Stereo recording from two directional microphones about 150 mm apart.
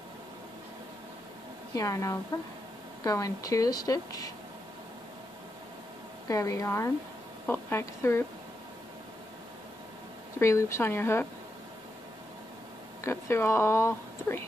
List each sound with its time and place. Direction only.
1.7 s speech: 20° left (ahead or behind)
6.2 s speech: 20° left (ahead or behind)
10.4 s speech: 20° left (ahead or behind)
13.0 s speech: 15° left (ahead or behind)